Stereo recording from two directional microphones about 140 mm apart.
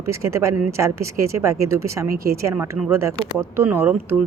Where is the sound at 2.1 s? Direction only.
90° right.